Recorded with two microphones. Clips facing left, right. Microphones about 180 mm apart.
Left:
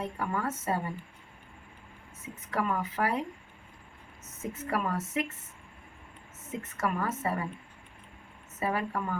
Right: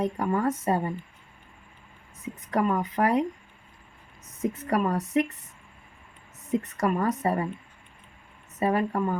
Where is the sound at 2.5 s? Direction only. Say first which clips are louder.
Right 6 dB; 35° right (ahead or behind).